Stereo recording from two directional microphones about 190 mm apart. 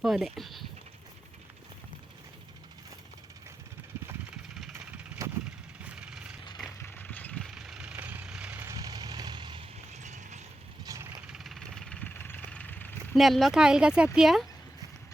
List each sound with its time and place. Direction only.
0.0 s speech: centre (ahead or behind)
5.2 s vehicle: 15° right (ahead or behind)
5.8 s vehicle: 5° right (ahead or behind)
6.7 s vehicle: 10° left (ahead or behind); by 9.6 s 25° right (ahead or behind)
9.9 s clip-clop: 40° right (ahead or behind)
10.8 s vehicle: 15° right (ahead or behind)
11.3 s vehicle: centre (ahead or behind)
13.1 s speech: centre (ahead or behind)